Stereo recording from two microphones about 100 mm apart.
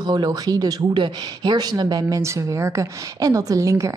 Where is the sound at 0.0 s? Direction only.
45° right (ahead or behind).